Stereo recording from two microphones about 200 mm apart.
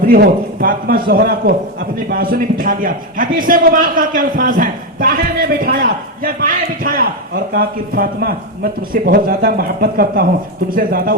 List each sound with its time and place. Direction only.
0.1 s a man's voice: 45° right (ahead or behind)